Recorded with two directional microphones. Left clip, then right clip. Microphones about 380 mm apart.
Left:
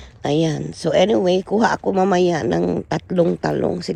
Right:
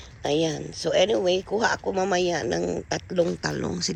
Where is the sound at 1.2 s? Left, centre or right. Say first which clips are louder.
Left 6 dB; centre.